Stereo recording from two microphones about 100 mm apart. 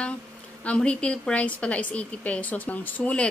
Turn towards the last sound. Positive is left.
turn(degrees=10)  # may be behind; listen again after turning